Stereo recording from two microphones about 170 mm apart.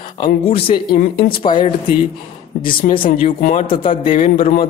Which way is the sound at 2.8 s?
55° left (ahead or behind).